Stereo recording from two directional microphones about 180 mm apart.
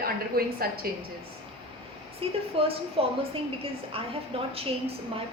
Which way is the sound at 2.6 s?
30° right (ahead or behind).